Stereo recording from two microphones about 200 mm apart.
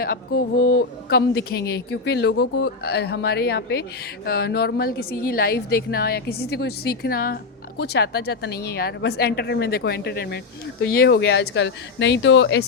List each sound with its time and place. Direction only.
0.0 s a woman's voice: 50° left (ahead or behind); by 12.6 s 65° left (ahead or behind)